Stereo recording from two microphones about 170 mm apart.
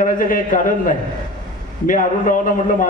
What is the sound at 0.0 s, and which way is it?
A man's voice, 50° left (ahead or behind).